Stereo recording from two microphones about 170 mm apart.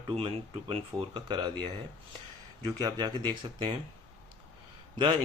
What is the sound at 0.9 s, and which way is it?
Speech, 25° right (ahead or behind).